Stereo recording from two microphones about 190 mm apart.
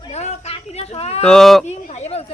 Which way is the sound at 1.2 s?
Centre (ahead or behind).